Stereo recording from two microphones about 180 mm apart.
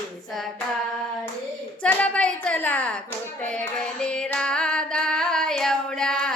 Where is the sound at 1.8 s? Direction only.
5° left (ahead or behind).